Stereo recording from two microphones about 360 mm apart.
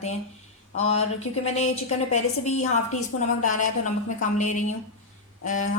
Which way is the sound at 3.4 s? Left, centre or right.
Left.